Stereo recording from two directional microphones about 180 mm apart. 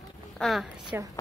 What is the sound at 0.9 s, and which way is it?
Speech, 10° right (ahead or behind).